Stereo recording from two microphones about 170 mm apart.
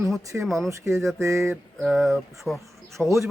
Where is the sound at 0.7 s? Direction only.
15° right (ahead or behind).